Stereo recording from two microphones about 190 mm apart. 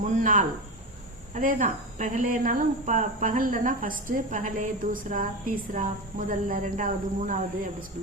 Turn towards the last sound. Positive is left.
turn(degrees=-45)  # may be behind; listen again after turning